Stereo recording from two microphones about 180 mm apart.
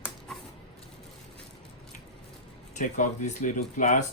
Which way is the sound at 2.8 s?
45° left (ahead or behind).